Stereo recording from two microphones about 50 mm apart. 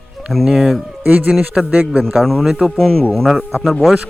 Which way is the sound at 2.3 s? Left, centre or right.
Centre.